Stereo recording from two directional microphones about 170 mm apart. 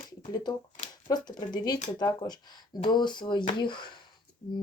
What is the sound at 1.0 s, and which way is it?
Speech, 25° left (ahead or behind).